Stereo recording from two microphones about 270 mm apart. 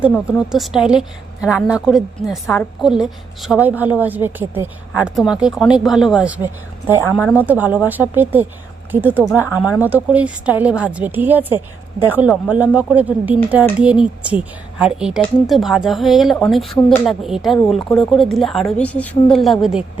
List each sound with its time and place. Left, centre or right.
0.1 s speech: centre